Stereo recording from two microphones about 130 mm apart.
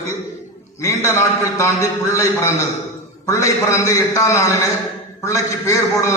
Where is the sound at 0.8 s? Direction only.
20° left (ahead or behind).